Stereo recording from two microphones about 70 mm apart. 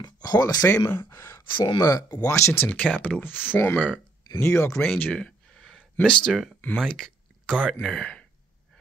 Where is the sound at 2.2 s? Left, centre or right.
Left.